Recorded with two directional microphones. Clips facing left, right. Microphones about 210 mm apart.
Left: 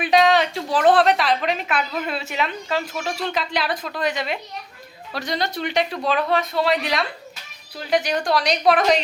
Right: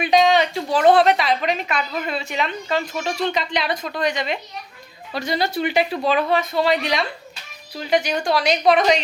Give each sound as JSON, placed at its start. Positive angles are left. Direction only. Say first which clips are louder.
{"t": 0.0, "sound": "a woman's voice", "louder": "right 1 dB", "side_deg": 0}